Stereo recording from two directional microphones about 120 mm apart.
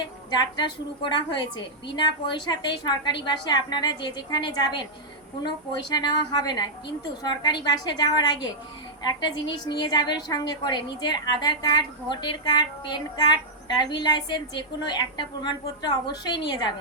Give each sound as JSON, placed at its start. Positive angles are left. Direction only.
{"t": 0.3, "sound": "a woman's voice", "side_deg": 40}